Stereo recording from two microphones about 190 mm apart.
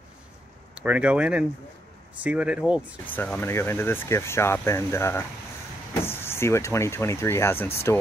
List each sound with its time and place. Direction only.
0.7 s speech: 5° right (ahead or behind)
3.1 s speech: 10° left (ahead or behind)